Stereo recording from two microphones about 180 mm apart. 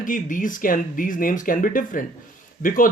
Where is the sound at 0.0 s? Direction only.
50° left (ahead or behind).